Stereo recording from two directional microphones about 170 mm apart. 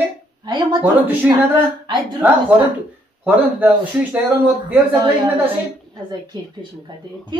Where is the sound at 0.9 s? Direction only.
10° right (ahead or behind).